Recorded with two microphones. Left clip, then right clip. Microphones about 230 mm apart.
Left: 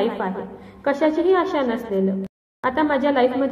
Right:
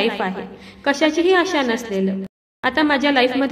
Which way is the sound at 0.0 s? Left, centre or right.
Right.